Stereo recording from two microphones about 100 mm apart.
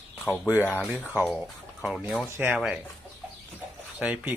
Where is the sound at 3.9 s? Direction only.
10° right (ahead or behind).